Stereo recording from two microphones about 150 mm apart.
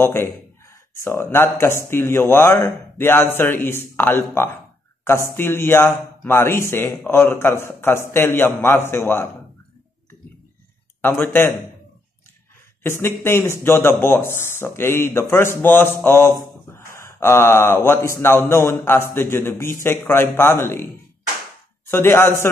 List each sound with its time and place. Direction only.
0.0 s speech: 15° left (ahead or behind)
11.0 s speech: 15° left (ahead or behind)
12.8 s a man's voice: 15° left (ahead or behind)